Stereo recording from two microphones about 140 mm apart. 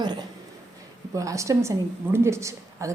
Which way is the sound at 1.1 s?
25° right (ahead or behind).